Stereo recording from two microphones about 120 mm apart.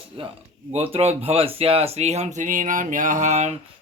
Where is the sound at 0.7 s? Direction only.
60° right (ahead or behind); by 3.5 s 75° right (ahead or behind).